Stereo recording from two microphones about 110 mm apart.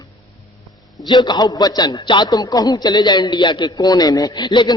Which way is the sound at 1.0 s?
40° left (ahead or behind).